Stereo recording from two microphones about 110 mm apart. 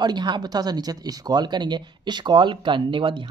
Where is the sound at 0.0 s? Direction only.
40° right (ahead or behind).